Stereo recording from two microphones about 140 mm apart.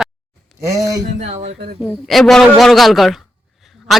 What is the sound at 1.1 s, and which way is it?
Speech, 50° right (ahead or behind).